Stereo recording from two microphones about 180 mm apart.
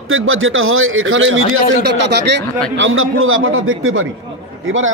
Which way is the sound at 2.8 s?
90° right.